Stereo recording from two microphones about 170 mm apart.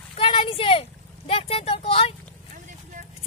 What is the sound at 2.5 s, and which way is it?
Clip-clop, 50° right (ahead or behind).